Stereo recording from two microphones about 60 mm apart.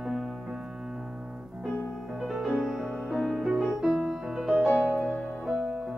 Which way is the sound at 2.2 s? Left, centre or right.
Centre.